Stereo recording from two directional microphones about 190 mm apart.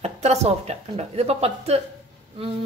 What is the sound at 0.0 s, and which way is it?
Speech, 35° right (ahead or behind).